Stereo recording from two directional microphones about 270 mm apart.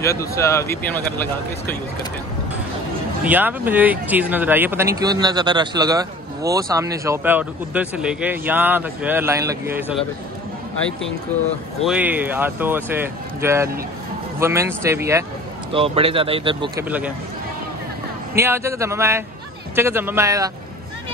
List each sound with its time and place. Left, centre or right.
0.0 s speech: centre
3.3 s speech: centre
11.8 s speech: centre
15.7 s speech: right
18.3 s speech: centre